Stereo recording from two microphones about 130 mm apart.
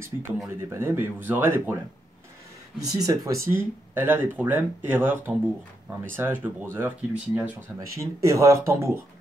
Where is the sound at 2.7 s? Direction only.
30° right (ahead or behind).